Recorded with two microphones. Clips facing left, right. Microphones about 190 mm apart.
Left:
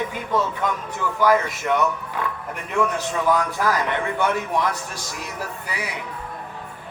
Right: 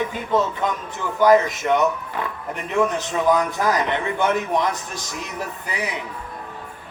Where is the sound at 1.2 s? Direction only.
20° right (ahead or behind).